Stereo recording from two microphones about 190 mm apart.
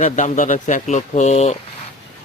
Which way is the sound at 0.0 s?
40° left (ahead or behind).